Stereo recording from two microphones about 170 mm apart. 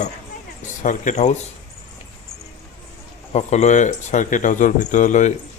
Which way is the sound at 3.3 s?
40° left (ahead or behind).